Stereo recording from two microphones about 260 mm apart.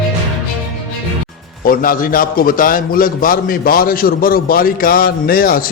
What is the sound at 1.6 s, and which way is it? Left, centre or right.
A man's voice, left.